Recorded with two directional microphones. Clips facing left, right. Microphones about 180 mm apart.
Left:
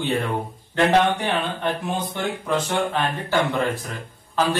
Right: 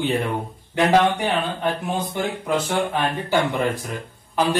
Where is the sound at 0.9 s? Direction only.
10° right (ahead or behind).